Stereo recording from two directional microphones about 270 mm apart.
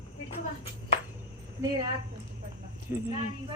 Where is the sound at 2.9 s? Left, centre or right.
Centre.